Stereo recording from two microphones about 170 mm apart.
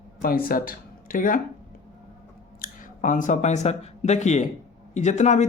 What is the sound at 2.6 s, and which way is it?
A woman's voice, 50° left (ahead or behind).